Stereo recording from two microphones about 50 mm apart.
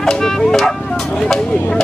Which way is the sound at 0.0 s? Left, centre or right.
Centre.